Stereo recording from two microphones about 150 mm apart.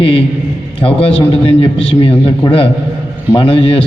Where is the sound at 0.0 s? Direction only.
40° left (ahead or behind).